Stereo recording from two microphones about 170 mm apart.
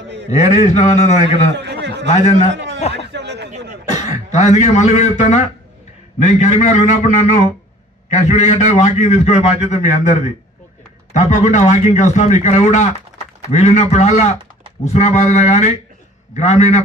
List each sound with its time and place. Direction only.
0.3 s a man's voice: 40° left (ahead or behind)
1.6 s a man's voice: 90° right
2.0 s a man's voice: 40° left (ahead or behind)
2.9 s a sound: 90° right
4.3 s a man's voice: 40° left (ahead or behind)
11.1 s a man's voice: 45° left (ahead or behind)